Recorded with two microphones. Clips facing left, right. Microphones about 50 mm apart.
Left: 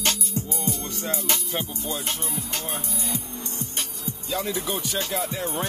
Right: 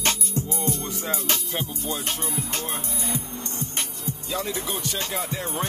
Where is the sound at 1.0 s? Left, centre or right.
Centre.